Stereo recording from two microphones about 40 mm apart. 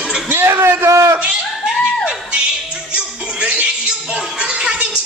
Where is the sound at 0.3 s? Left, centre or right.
Right.